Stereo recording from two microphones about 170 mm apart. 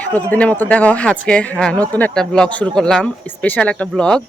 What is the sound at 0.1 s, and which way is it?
Speech, 10° left (ahead or behind).